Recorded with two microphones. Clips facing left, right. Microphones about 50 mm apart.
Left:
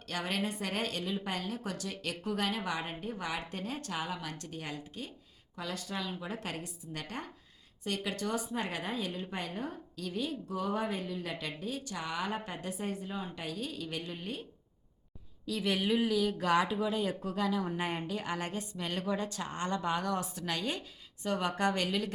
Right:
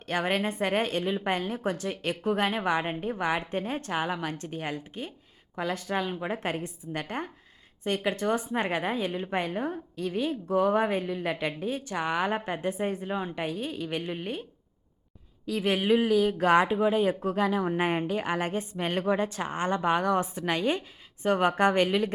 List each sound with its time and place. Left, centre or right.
0.0 s a woman's voice: right
15.4 s a woman's voice: right